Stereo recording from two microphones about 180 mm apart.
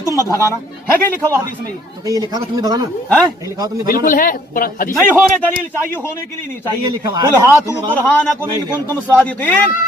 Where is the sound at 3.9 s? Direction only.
50° left (ahead or behind).